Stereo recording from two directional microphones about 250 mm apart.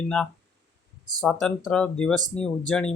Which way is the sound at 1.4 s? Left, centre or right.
Centre.